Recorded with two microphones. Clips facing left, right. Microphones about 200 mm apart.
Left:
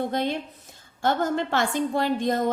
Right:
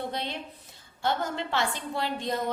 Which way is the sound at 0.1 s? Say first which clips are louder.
Left 8 dB; 50° left (ahead or behind).